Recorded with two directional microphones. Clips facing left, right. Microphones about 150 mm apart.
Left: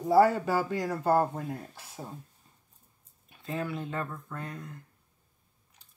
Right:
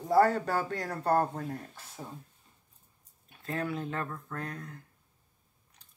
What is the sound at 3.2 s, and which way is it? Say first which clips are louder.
Speech: even; centre (ahead or behind).